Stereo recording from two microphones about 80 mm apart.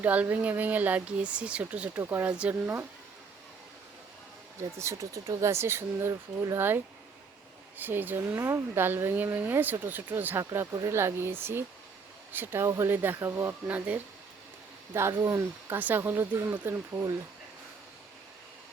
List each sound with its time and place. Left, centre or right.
0.0 s speech: right
2.0 s speech: right
4.8 s speech: right
13.7 s speech: centre
14.9 s speech: right
15.8 s speech: right